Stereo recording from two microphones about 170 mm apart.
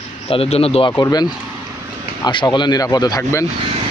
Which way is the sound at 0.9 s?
20° left (ahead or behind).